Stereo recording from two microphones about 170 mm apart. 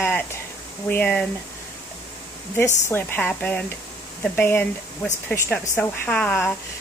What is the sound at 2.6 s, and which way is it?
A woman's voice, 15° left (ahead or behind).